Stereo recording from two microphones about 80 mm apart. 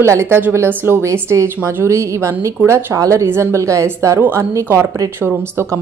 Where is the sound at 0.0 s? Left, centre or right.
Right.